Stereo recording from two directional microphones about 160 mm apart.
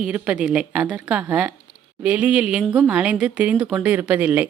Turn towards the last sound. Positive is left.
turn(degrees=-10)  # may be behind; listen again after turning